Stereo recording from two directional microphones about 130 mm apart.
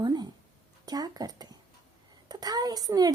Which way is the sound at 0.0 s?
30° right (ahead or behind).